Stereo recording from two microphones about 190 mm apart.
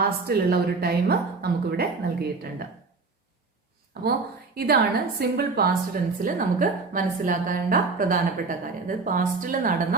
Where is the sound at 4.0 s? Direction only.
55° right (ahead or behind).